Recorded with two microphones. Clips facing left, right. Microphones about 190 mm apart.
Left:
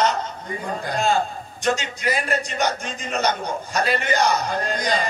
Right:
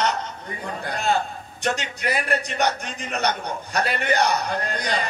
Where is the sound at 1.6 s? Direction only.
60° right (ahead or behind).